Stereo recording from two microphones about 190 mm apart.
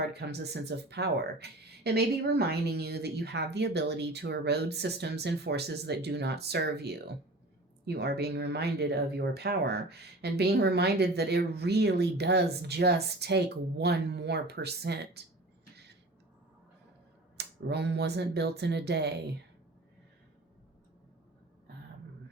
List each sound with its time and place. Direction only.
0.0 s speech: 60° right (ahead or behind)
15.7 s a sound: 60° right (ahead or behind)
17.3 s speech: 60° right (ahead or behind)